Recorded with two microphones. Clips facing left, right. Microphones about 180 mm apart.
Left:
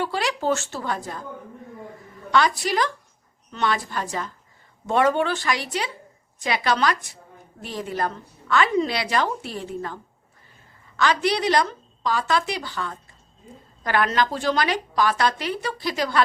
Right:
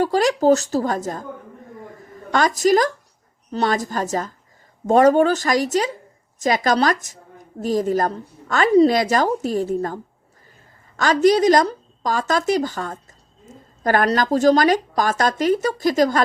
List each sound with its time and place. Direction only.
0.0 s speech: 40° right (ahead or behind)